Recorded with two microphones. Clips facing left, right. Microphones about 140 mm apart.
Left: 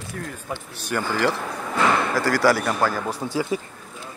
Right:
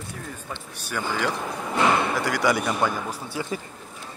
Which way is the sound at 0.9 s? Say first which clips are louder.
Left 4 dB; centre (ahead or behind).